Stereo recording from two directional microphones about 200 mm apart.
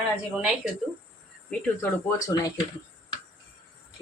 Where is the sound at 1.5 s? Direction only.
10° left (ahead or behind).